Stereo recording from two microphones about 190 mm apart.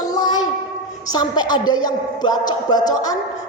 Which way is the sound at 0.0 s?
20° left (ahead or behind).